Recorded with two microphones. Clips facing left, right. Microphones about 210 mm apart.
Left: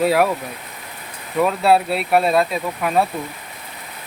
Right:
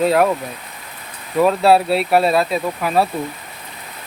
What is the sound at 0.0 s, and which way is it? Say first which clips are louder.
Speech: right 1 dB; 5° left (ahead or behind).